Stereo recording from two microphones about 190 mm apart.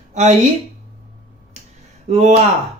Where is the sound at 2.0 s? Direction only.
35° right (ahead or behind).